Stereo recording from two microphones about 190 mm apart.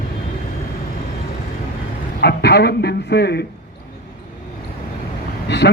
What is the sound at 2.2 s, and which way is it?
Speech, 60° left (ahead or behind).